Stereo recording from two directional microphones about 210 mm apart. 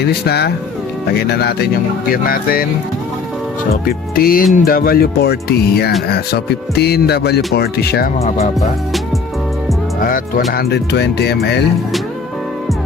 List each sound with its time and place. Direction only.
0.0 s music: 50° left (ahead or behind)
3.8 s music: 45° left (ahead or behind)
10.0 s music: 45° left (ahead or behind)